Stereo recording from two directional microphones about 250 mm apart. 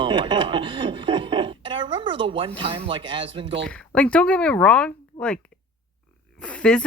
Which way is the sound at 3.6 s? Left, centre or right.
Centre.